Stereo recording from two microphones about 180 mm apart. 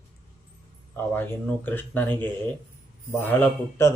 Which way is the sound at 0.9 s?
10° left (ahead or behind).